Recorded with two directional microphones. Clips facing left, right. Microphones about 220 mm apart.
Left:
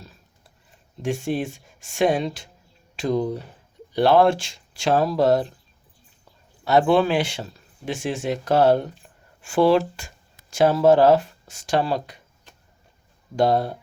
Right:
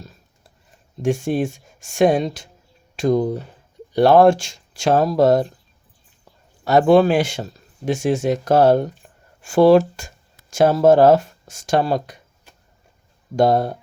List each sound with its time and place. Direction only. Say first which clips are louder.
1.0 s speech: right 5 dB; 45° right (ahead or behind)
6.7 s speech: right 5 dB; 45° right (ahead or behind)
13.3 s speech: right 3 dB; 45° right (ahead or behind)